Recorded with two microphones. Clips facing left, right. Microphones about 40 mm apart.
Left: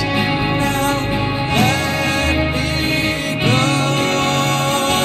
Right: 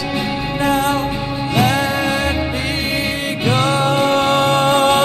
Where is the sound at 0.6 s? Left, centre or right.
Centre.